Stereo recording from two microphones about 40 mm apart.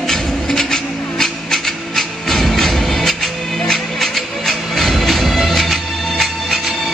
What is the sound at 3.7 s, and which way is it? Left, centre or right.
Music, centre.